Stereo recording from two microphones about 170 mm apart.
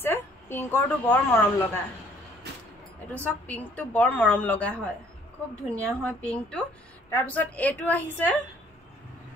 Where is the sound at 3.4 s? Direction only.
10° left (ahead or behind).